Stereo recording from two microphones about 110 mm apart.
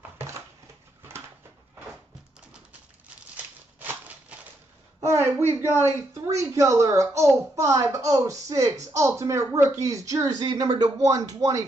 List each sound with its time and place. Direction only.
5.0 s a woman's voice: 25° right (ahead or behind)
10.4 s a woman's voice: 40° right (ahead or behind)